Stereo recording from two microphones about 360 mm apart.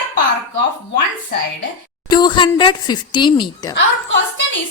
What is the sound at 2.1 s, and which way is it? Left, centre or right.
A woman's voice, centre.